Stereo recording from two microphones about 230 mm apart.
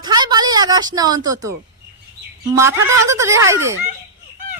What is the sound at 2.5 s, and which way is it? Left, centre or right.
Speech, centre.